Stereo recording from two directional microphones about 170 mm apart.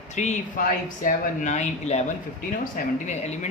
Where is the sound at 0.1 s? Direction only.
45° left (ahead or behind).